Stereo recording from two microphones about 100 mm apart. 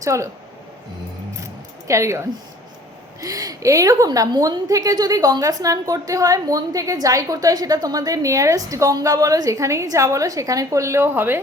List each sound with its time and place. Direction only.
0.0 s a woman's voice: 30° right (ahead or behind)
1.9 s a woman's voice: 30° right (ahead or behind)